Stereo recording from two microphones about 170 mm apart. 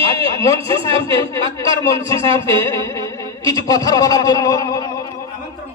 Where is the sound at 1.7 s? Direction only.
20° left (ahead or behind).